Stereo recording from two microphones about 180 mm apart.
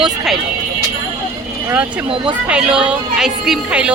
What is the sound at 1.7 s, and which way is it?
Speech, 10° right (ahead or behind).